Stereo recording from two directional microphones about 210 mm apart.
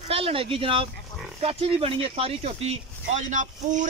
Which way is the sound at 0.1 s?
25° right (ahead or behind).